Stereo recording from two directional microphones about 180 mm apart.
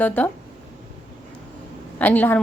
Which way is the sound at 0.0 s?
10° left (ahead or behind).